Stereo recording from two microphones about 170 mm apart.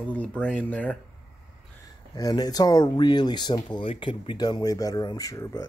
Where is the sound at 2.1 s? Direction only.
25° left (ahead or behind).